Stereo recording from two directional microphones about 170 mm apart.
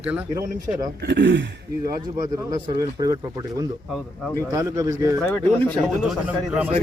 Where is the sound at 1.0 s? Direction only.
90° right.